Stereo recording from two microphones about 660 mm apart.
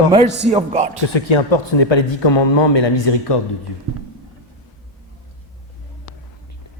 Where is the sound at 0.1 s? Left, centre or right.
Centre.